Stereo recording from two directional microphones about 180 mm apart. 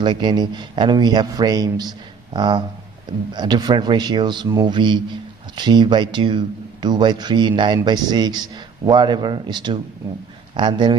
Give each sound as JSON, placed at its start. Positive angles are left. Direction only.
{"t": 0.0, "sound": "a man's voice", "side_deg": -25}